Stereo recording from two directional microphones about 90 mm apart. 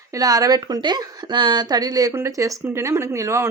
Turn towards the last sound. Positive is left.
turn(degrees=-35)  # may be behind; listen again after turning